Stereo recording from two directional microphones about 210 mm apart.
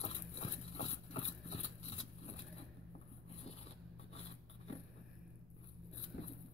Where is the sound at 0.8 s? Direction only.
25° left (ahead or behind).